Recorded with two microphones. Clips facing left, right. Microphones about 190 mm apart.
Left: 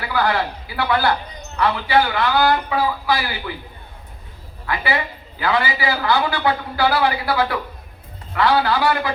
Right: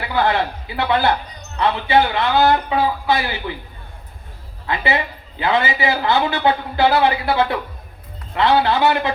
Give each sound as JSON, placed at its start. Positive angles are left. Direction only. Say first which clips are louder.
{"t": 0.1, "sound": "a man's voice", "louder": "right 2 dB", "side_deg": -20}
{"t": 4.6, "sound": "a man's voice", "louder": "right 2 dB", "side_deg": -20}